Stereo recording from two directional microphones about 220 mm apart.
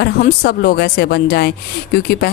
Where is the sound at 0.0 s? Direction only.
45° left (ahead or behind).